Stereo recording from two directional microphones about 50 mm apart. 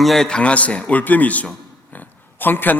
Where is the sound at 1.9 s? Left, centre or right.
Left.